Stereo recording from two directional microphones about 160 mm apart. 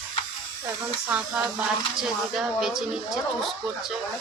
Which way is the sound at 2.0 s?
5° right (ahead or behind).